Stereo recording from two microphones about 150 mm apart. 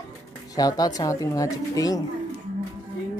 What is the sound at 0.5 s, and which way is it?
Speech, 25° left (ahead or behind).